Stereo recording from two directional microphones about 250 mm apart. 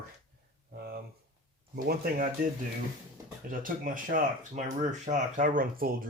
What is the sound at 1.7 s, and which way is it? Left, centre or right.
Speech, right.